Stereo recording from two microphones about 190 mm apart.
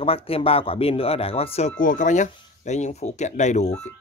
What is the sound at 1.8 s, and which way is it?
Speech, 40° left (ahead or behind).